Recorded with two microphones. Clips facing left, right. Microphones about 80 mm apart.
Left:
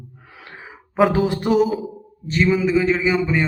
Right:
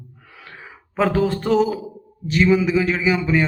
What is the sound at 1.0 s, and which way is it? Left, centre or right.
Speech, centre.